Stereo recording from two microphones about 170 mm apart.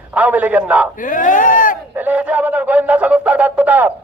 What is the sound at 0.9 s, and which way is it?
Speech, 50° left (ahead or behind).